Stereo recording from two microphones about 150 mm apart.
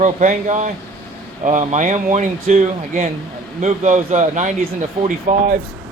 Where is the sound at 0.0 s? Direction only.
55° right (ahead or behind).